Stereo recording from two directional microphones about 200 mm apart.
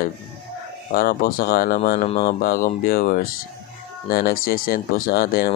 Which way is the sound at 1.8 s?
35° left (ahead or behind).